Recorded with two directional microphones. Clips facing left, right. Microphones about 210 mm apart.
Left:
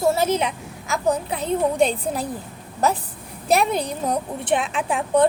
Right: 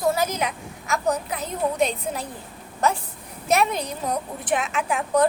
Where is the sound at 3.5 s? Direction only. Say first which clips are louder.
Left 2 dB; 35° left (ahead or behind).